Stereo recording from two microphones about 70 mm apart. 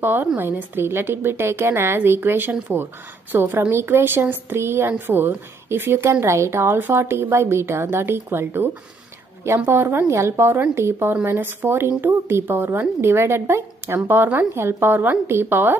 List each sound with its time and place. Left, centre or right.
0.0 s a woman's voice: right
9.7 s a woman's voice: right